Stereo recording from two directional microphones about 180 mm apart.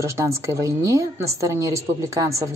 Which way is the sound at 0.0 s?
15° right (ahead or behind).